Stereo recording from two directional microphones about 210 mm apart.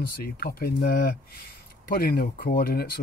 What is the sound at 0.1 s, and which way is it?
Speech, 45° left (ahead or behind).